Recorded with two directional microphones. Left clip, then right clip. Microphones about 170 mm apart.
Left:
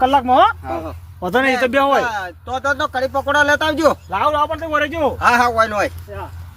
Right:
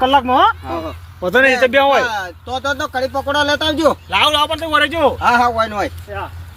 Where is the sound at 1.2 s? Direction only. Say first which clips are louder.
Right 4 dB; 90° left.